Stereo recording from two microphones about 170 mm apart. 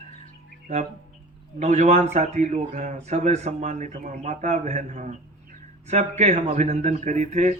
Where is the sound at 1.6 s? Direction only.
45° right (ahead or behind).